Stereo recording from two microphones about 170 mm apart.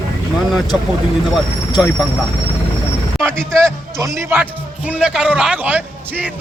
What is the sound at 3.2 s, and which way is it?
Speech, 15° right (ahead or behind).